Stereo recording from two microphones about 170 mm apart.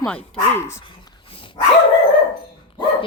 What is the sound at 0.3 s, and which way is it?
Speech, 15° left (ahead or behind).